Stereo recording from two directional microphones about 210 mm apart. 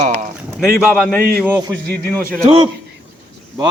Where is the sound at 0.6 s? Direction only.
5° right (ahead or behind).